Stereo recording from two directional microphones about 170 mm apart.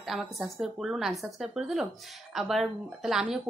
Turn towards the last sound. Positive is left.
turn(degrees=-5)  # may be behind; listen again after turning